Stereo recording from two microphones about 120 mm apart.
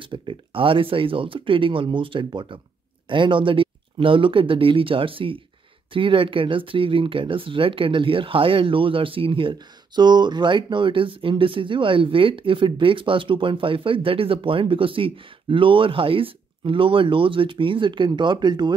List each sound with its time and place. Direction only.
0.1 s speech: 45° right (ahead or behind)